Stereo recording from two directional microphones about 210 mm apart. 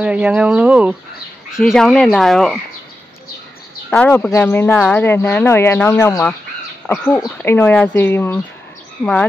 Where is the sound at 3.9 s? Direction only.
5° left (ahead or behind).